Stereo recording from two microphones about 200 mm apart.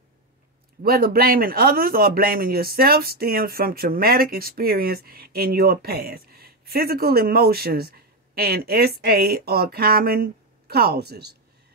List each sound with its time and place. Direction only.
0.8 s speech: 50° right (ahead or behind)